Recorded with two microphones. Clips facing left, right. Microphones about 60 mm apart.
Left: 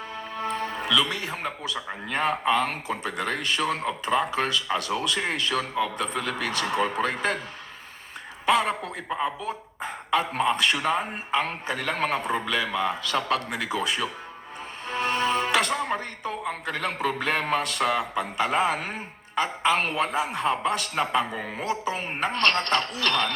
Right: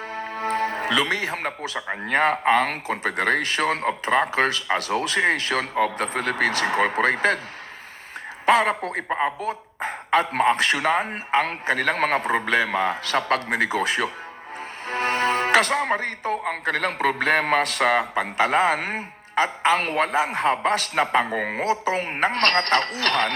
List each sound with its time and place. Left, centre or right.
0.1 s music: right
1.9 s speech: right
8.4 s speech: right
9.0 s a man's voice: right
9.4 s a man's voice: right
14.8 s music: right
16.0 s speech: right
18.3 s a man's voice: right
19.6 s speech: right